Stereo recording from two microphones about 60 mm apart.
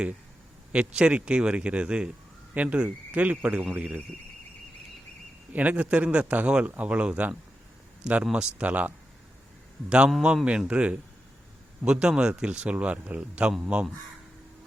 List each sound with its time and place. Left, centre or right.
0.7 s speech: centre
5.5 s speech: right
10.3 s a man's voice: centre